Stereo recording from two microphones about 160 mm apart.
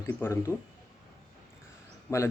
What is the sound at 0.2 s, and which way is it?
Speech, 15° left (ahead or behind).